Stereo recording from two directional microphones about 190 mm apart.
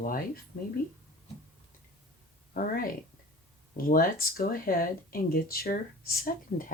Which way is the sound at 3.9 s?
50° left (ahead or behind).